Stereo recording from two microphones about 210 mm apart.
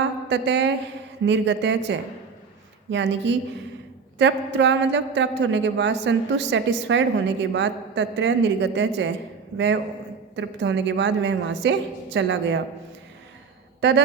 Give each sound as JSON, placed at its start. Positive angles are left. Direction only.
{"t": 0.3, "sound": "a woman's voice", "side_deg": -55}